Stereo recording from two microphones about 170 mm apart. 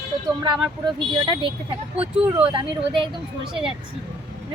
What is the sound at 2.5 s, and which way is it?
Speech, 30° right (ahead or behind).